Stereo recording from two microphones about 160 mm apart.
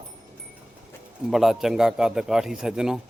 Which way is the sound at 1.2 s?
Centre (ahead or behind).